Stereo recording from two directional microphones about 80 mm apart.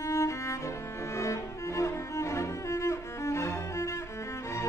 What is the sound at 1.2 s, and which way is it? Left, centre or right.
Cello, left.